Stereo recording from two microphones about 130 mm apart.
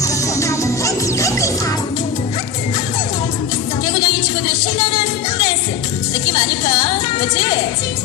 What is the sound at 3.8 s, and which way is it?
Music, 35° left (ahead or behind).